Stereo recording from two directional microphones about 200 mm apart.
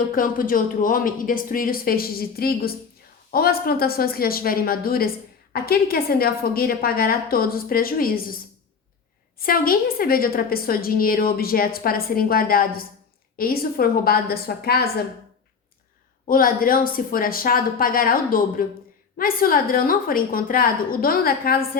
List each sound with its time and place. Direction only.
0.1 s a woman's voice: 45° left (ahead or behind)
9.4 s a woman's voice: 45° left (ahead or behind)
16.2 s a woman's voice: 45° left (ahead or behind)